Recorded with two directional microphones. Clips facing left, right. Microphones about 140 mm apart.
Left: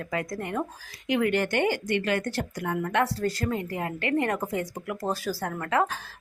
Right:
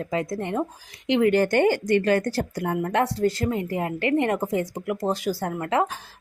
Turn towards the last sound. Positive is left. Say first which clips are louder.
# right 2 dB
turn(degrees=-20)  # may be behind; listen again after turning